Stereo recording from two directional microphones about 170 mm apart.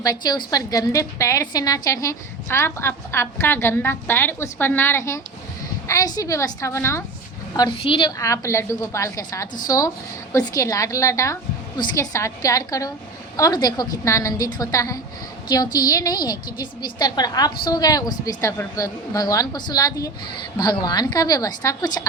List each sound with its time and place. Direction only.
0.0 s a woman's voice: 20° left (ahead or behind)
7.5 s a woman's voice: 25° left (ahead or behind)
8.2 s a woman's voice: 15° left (ahead or behind)